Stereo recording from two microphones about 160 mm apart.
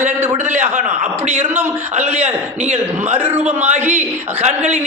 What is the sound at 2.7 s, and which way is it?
A man's voice, 40° right (ahead or behind).